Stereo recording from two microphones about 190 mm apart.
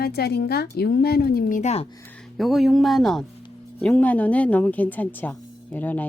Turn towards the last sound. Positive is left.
turn(degrees=10)  # may be behind; listen again after turning